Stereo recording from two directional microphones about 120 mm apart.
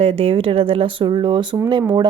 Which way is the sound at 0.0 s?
60° right (ahead or behind).